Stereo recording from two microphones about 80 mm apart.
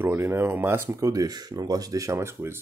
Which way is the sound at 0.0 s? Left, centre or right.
Right.